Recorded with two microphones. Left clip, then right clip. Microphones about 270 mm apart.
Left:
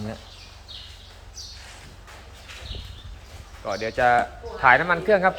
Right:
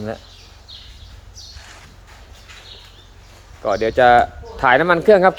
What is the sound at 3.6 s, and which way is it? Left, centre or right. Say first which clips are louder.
Speech: right 8 dB; right.